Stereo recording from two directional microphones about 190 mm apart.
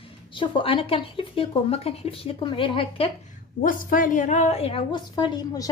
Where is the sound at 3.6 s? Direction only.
45° left (ahead or behind); by 5.6 s 20° left (ahead or behind).